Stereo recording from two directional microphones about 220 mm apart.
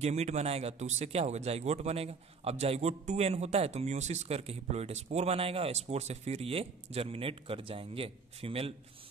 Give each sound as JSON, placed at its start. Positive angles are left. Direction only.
{"t": 0.0, "sound": "speech", "side_deg": -30}